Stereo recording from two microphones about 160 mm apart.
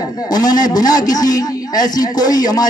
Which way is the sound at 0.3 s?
25° left (ahead or behind).